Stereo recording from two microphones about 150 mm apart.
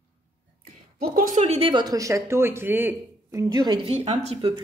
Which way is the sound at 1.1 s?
65° right (ahead or behind).